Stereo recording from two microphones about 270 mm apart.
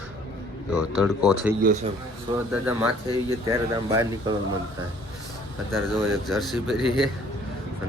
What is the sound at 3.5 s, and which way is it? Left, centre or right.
Speech, centre.